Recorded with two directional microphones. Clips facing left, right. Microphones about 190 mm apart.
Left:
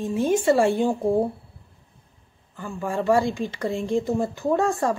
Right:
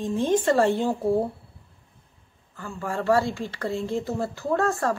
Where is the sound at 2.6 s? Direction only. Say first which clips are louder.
Left 3 dB; 15° left (ahead or behind).